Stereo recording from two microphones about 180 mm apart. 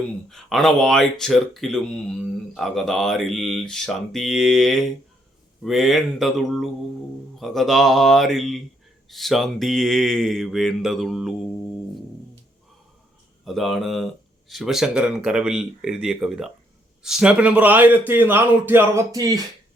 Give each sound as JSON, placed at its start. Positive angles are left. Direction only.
{"t": 0.3, "sound": "speech", "side_deg": 0}
{"t": 13.4, "sound": "a man's voice", "side_deg": 0}